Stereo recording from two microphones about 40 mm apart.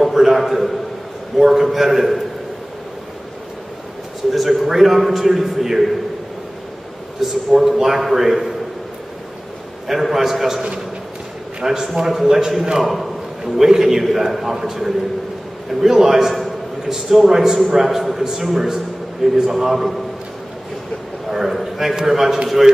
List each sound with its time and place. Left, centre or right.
0.0 s a sound: centre
1.4 s a man's voice: centre
4.3 s a man's voice: centre
7.2 s a man's voice: centre
9.8 s a man's voice: centre
11.6 s a man's voice: centre
12.8 s a man's voice: centre
13.4 s a man's voice: centre
21.3 s a man's voice: centre